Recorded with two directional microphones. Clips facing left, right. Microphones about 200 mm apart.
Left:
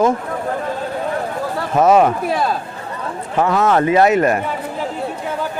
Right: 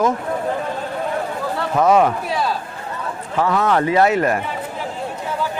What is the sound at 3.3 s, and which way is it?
Speech, 25° left (ahead or behind).